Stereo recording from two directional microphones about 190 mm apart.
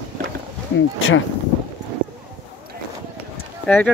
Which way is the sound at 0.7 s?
90° left.